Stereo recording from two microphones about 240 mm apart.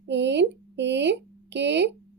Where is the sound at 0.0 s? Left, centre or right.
Right.